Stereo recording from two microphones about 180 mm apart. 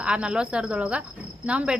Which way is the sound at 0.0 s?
5° right (ahead or behind).